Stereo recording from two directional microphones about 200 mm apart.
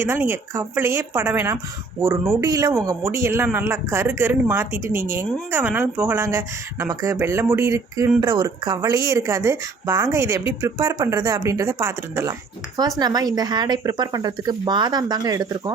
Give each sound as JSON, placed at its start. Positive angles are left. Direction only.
{"t": 0.0, "sound": "speech", "side_deg": -10}